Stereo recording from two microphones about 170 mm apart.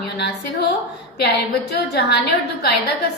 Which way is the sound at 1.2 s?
70° left (ahead or behind).